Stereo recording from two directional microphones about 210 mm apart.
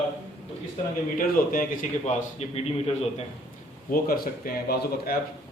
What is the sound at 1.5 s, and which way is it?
A man's voice, 35° left (ahead or behind).